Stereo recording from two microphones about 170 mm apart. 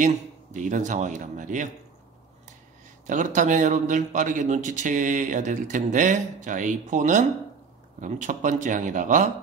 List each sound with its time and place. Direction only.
0.0 s a man's voice: 45° right (ahead or behind)
3.1 s a man's voice: 50° right (ahead or behind)